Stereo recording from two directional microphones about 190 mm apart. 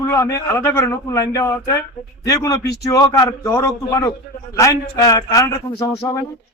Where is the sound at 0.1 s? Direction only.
15° left (ahead or behind).